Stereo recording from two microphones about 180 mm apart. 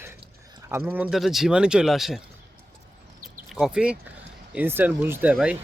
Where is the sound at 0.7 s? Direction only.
10° right (ahead or behind).